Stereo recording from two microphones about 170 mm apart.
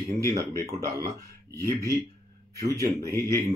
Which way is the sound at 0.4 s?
20° right (ahead or behind).